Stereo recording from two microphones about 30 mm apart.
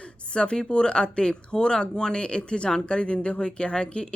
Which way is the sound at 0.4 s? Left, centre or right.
Centre.